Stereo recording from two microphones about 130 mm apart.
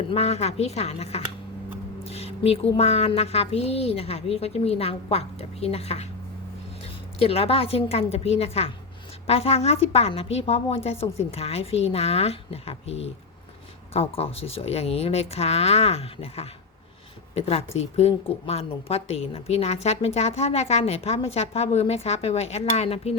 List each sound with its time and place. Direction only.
0.1 s a woman's voice: 55° left (ahead or behind)
7.2 s a woman's voice: 50° left (ahead or behind)